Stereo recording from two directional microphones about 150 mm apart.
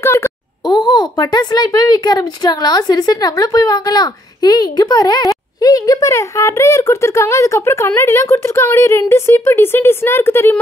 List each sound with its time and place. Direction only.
0.0 s a child's voice: 20° left (ahead or behind)